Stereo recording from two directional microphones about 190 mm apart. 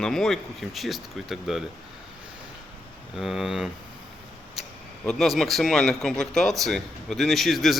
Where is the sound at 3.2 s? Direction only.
Centre (ahead or behind).